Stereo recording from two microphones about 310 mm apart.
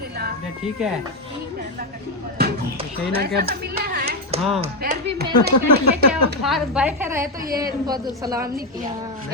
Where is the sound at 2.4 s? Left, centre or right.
Right.